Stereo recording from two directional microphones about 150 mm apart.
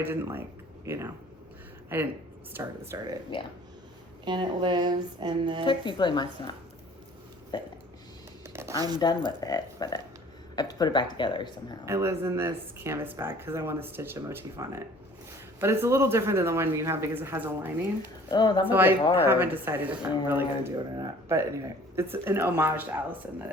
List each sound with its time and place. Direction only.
0.0 s speech: 15° right (ahead or behind)
3.3 s speech: 35° left (ahead or behind)
4.3 s speech: 30° right (ahead or behind)
5.6 s speech: 30° left (ahead or behind)
8.4 s a sound: 15° right (ahead or behind)
9.4 s speech: 25° left (ahead or behind)
11.9 s speech: 20° right (ahead or behind)
18.3 s speech: 30° left (ahead or behind)
18.6 s speech: 15° right (ahead or behind)